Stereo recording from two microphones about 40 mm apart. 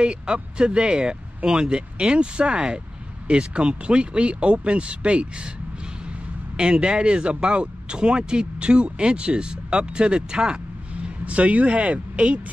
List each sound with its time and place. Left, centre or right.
0.0 s speech: right
6.5 s speech: right
11.2 s speech: right